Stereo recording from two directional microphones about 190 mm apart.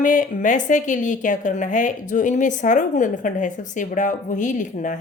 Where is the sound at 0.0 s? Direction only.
45° left (ahead or behind).